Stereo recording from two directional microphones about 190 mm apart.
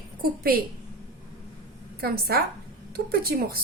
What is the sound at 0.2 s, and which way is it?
Speech, 50° right (ahead or behind).